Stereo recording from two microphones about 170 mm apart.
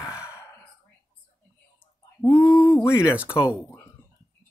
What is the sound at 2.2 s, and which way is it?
Speech, 15° left (ahead or behind).